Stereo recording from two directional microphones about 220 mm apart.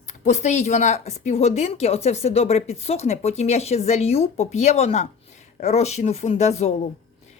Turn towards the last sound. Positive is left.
turn(degrees=30)  # may be behind; listen again after turning